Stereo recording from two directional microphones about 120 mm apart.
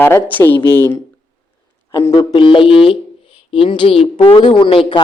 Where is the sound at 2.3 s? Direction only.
45° left (ahead or behind).